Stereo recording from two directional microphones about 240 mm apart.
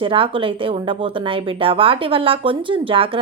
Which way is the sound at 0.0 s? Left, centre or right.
Right.